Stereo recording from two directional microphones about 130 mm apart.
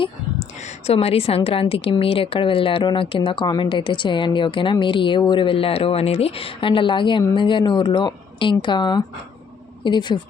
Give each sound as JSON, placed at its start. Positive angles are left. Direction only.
{"t": 0.6, "sound": "a woman's voice", "side_deg": 55}